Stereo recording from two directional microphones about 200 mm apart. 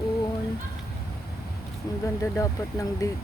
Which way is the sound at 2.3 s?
15° left (ahead or behind).